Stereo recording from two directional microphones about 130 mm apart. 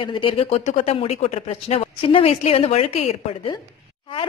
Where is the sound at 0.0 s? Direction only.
40° left (ahead or behind).